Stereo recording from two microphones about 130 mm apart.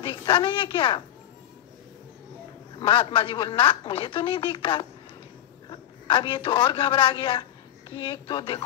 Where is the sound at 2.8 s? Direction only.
40° left (ahead or behind).